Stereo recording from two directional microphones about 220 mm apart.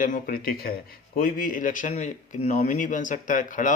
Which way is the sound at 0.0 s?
40° left (ahead or behind).